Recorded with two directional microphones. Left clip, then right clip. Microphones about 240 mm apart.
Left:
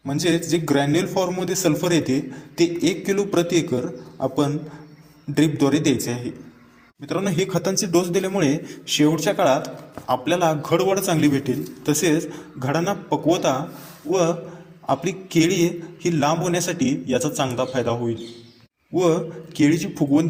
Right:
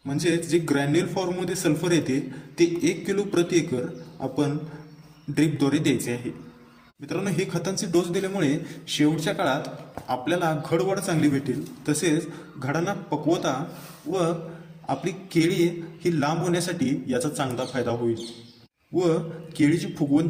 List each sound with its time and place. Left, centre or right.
0.0 s a man's voice: centre
7.1 s a man's voice: centre